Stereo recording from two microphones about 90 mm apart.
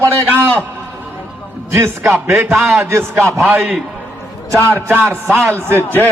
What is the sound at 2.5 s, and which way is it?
Speech, centre (ahead or behind).